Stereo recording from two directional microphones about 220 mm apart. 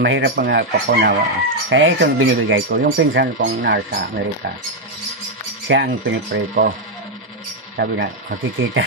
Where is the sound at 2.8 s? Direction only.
45° right (ahead or behind).